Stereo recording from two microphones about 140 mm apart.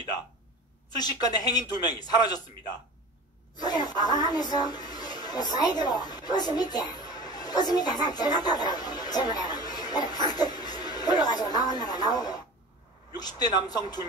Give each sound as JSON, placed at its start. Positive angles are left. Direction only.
{"t": 0.9, "sound": "speech", "side_deg": 30}
{"t": 3.5, "sound": "a woman's voice", "side_deg": 30}